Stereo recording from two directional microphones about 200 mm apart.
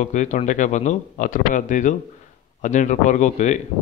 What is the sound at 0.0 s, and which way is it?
Speech, 40° left (ahead or behind).